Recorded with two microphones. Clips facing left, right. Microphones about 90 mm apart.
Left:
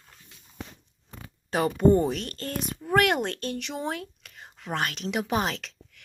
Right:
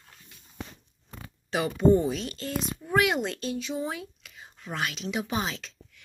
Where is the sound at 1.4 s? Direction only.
45° left (ahead or behind); by 4.8 s 70° left (ahead or behind).